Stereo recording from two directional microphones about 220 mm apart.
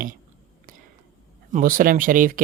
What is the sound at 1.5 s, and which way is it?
Speech, 40° right (ahead or behind).